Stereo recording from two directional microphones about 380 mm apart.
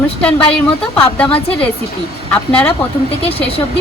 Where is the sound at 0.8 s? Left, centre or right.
Centre.